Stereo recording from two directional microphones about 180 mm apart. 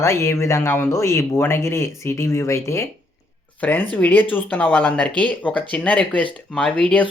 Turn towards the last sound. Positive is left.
turn(degrees=5)  # may be behind; listen again after turning